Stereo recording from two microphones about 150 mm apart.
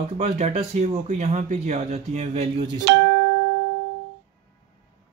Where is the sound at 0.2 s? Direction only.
50° right (ahead or behind).